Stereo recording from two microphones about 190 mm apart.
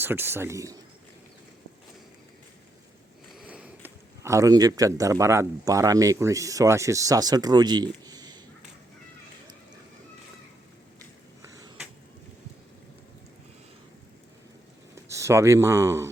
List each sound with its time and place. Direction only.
0.0 s speech: 10° right (ahead or behind)
3.3 s speech: 5° right (ahead or behind)
14.9 s speech: 15° right (ahead or behind)